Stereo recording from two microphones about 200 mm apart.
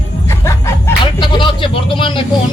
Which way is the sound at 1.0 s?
25° left (ahead or behind).